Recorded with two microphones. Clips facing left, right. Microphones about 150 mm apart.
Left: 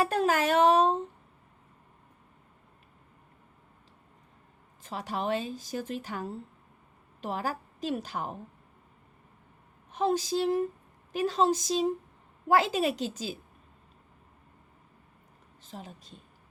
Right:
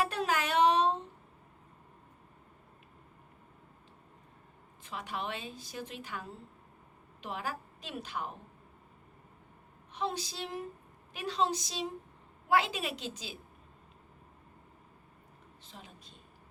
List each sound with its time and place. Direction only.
0.0 s a sound: 45° left (ahead or behind)
4.8 s a woman's voice: 40° left (ahead or behind)
9.9 s a woman's voice: 45° left (ahead or behind)
15.6 s speech: 45° left (ahead or behind)